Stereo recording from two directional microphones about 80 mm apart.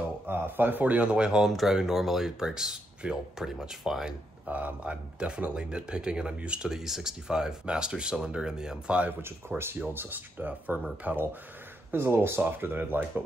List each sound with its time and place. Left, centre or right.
0.3 s speech: right; by 4.1 s centre
4.5 s speech: centre
9.2 s speech: right
11.9 s speech: right